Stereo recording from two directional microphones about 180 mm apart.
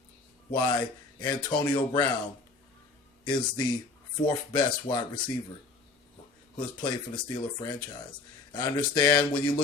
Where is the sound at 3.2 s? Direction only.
25° left (ahead or behind).